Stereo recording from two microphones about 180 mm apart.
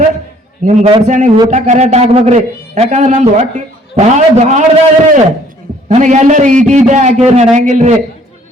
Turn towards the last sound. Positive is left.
turn(degrees=-40)  # may be behind; listen again after turning